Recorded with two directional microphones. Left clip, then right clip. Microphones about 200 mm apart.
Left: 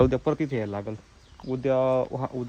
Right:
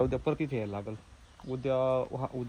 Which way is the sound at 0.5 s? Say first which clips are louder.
Left 5 dB; 70° left (ahead or behind).